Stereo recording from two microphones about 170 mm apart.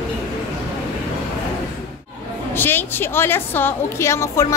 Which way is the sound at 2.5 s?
10° left (ahead or behind).